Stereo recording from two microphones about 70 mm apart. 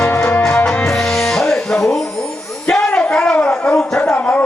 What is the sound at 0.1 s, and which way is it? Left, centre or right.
Music, left.